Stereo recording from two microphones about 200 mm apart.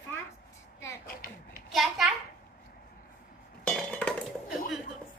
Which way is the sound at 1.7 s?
Centre (ahead or behind).